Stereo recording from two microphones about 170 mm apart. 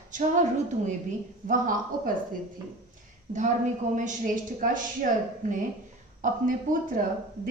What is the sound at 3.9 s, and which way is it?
A woman's voice, 50° right (ahead or behind).